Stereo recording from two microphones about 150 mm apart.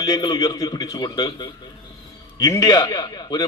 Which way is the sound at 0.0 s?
25° left (ahead or behind).